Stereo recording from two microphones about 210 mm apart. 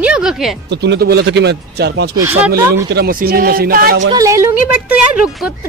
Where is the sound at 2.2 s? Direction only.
10° right (ahead or behind).